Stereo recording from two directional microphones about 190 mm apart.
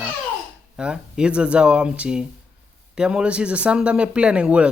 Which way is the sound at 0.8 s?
5° right (ahead or behind).